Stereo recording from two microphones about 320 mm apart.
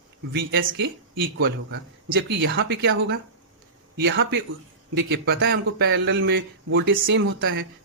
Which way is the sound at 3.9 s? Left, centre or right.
Right.